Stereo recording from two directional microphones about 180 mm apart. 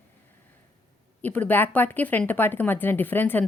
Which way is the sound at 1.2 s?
10° left (ahead or behind).